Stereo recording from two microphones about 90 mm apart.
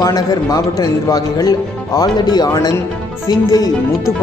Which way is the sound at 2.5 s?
35° left (ahead or behind).